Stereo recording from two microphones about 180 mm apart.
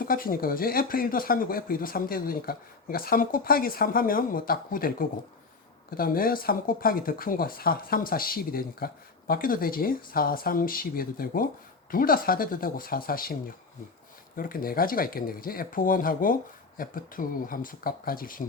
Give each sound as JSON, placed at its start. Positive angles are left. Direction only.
{"t": 0.0, "sound": "speech", "side_deg": 50}
{"t": 14.3, "sound": "speech", "side_deg": 50}